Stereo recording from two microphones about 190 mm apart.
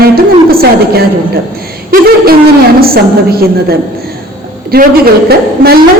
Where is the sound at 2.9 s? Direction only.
55° right (ahead or behind).